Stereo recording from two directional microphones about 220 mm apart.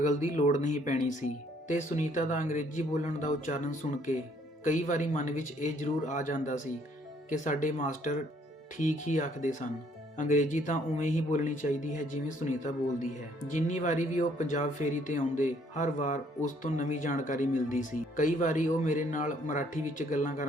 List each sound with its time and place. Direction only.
0.0 s speech: 35° left (ahead or behind)